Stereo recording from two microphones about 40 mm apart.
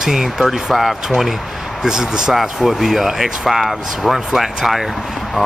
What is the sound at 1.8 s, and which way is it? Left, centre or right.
Speech, centre.